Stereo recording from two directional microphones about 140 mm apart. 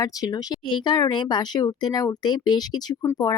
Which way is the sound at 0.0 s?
25° left (ahead or behind).